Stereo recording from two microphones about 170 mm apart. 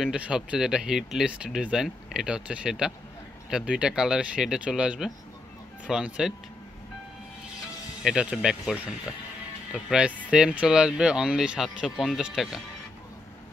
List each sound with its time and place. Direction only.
0.0 s speech: 5° right (ahead or behind)
8.0 s speech: 5° right (ahead or behind)